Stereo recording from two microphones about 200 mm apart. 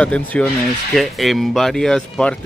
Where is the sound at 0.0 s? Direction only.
5° left (ahead or behind).